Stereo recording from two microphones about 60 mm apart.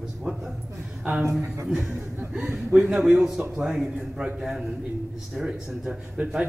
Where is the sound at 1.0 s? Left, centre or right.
Right.